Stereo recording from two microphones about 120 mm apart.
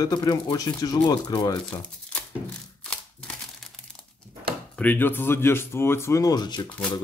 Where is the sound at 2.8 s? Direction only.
5° left (ahead or behind).